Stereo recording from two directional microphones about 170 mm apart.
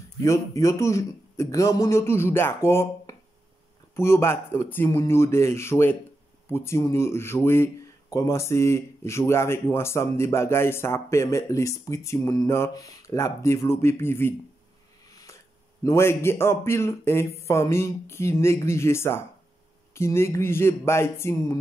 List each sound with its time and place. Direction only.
0.2 s a man's voice: 15° left (ahead or behind)